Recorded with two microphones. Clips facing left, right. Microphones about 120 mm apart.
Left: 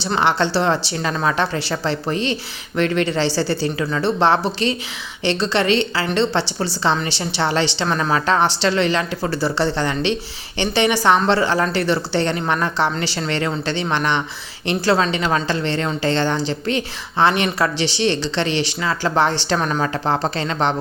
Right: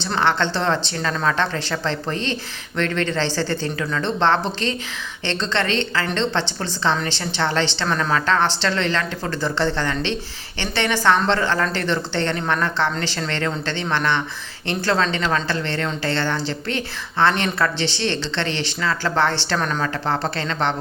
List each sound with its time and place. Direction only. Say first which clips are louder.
0.0 s a woman's voice: left 2 dB; 10° left (ahead or behind)